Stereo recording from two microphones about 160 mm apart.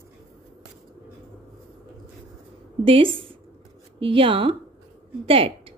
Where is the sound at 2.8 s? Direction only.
35° right (ahead or behind).